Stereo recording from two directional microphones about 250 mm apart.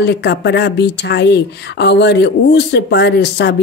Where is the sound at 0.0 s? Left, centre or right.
Left.